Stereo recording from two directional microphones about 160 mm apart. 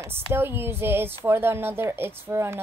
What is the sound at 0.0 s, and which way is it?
A woman's voice, 15° right (ahead or behind).